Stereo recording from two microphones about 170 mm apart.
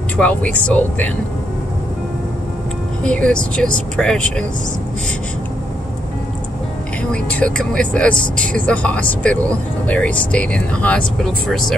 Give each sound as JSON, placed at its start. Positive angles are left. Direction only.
{"t": 0.2, "sound": "speech", "side_deg": 10}
{"t": 3.0, "sound": "speech", "side_deg": 5}
{"t": 7.1, "sound": "speech", "side_deg": 5}